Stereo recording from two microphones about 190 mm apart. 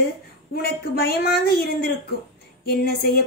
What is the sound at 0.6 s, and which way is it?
A woman's voice, 55° left (ahead or behind).